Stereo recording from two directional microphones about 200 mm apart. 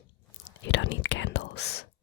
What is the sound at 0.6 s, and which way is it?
Whispering, 70° left (ahead or behind).